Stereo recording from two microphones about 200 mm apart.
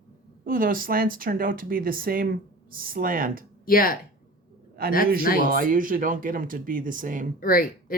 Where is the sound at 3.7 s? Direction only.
45° left (ahead or behind).